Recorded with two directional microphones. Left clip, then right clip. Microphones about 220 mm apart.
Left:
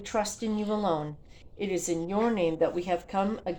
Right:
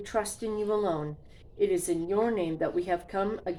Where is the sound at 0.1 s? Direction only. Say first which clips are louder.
Left 1 dB; 25° left (ahead or behind).